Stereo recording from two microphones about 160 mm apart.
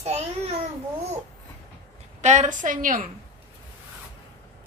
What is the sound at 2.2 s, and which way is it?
Speech, 50° right (ahead or behind).